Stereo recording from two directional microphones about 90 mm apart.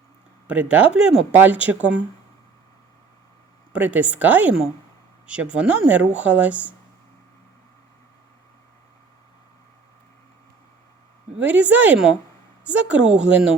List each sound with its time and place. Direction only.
0.4 s speech: 15° right (ahead or behind)
3.7 s speech: 15° right (ahead or behind)
11.3 s speech: 15° right (ahead or behind)